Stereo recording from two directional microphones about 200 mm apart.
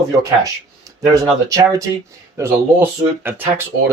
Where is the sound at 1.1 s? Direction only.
15° right (ahead or behind).